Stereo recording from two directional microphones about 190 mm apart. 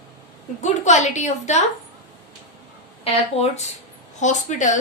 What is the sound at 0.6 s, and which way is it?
A woman's voice, 40° left (ahead or behind).